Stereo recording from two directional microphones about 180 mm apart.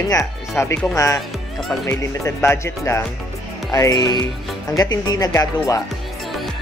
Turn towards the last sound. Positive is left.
turn(degrees=20)  # may be behind; listen again after turning